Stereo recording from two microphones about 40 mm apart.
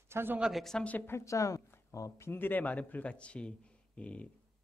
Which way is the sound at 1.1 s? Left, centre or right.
Left.